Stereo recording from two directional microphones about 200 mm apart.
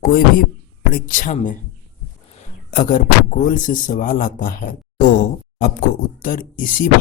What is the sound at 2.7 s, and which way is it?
A man's voice, 40° left (ahead or behind).